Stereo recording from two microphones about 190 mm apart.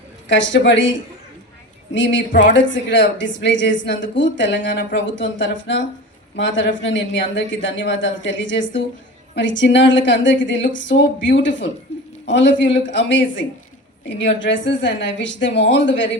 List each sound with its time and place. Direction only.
0.3 s a man's voice: 75° left (ahead or behind)